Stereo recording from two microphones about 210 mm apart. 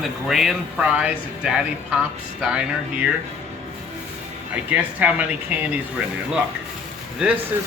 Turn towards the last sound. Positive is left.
turn(degrees=-5)  # may be behind; listen again after turning